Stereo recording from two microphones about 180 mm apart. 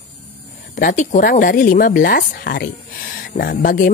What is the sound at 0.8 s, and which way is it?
Speech, 50° left (ahead or behind).